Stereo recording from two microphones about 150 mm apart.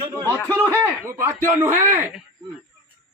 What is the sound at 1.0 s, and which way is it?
A man's voice, 15° right (ahead or behind).